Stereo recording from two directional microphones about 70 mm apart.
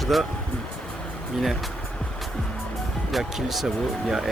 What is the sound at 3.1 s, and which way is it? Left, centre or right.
Speech, centre.